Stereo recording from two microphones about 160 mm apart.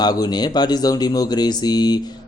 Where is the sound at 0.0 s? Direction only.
25° left (ahead or behind).